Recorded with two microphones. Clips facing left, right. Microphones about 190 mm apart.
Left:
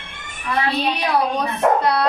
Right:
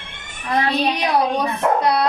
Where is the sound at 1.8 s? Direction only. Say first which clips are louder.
Right 1 dB; 15° right (ahead or behind).